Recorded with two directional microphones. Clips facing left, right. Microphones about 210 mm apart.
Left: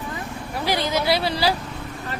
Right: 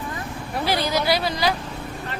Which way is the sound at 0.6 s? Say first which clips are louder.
Even; 15° left (ahead or behind).